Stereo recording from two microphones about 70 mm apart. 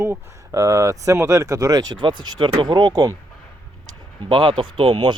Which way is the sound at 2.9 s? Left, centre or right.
Right.